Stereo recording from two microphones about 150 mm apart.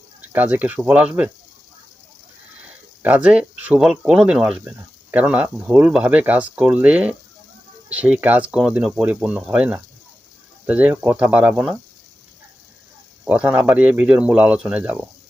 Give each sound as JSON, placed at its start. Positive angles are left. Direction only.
{"t": 0.2, "sound": "speech", "side_deg": -10}
{"t": 3.0, "sound": "speech", "side_deg": -10}
{"t": 13.2, "sound": "speech", "side_deg": -10}